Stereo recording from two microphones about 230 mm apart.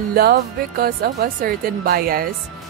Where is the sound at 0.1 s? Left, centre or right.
Right.